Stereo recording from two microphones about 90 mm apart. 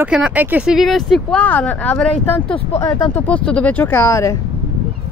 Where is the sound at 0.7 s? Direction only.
Centre (ahead or behind).